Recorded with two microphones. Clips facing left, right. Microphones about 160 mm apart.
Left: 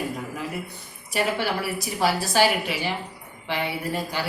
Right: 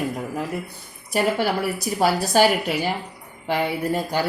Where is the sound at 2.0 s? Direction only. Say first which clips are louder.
Right 3 dB; 45° right (ahead or behind).